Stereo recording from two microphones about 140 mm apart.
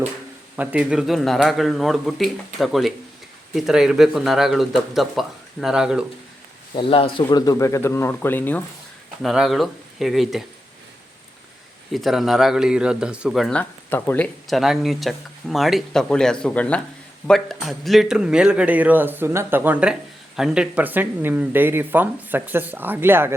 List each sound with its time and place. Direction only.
0.5 s speech: 10° right (ahead or behind)
6.7 s speech: 40° left (ahead or behind)
7.3 s speech: 25° left (ahead or behind)
9.2 s speech: centre (ahead or behind)
11.9 s speech: centre (ahead or behind)
13.6 s speech: 10° left (ahead or behind)
14.4 s a man's voice: centre (ahead or behind)